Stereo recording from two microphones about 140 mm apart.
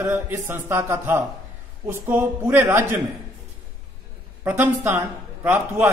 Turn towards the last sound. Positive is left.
turn(degrees=-10)  # may be behind; listen again after turning